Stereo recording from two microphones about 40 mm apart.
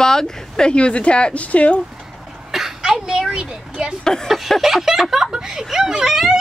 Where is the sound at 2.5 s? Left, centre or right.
Centre.